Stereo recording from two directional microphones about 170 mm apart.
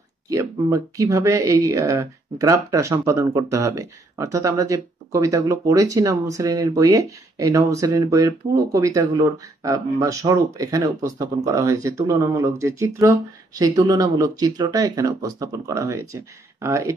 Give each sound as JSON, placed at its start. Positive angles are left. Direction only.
{"t": 0.3, "sound": "speech", "side_deg": -20}